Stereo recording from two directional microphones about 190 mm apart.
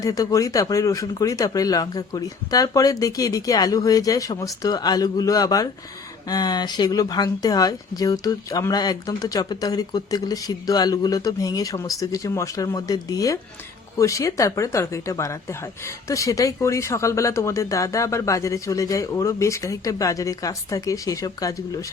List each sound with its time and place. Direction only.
0.0 s speech: 20° left (ahead or behind)